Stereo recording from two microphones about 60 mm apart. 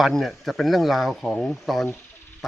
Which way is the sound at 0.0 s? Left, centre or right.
Centre.